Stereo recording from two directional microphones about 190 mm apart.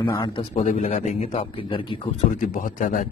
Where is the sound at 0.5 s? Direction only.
40° left (ahead or behind).